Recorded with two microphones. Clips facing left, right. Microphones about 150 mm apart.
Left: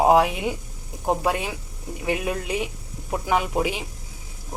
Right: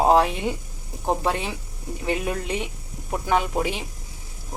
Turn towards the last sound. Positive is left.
turn(degrees=10)  # may be behind; listen again after turning